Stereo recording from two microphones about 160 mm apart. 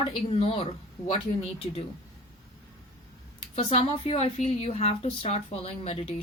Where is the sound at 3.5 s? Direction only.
40° left (ahead or behind).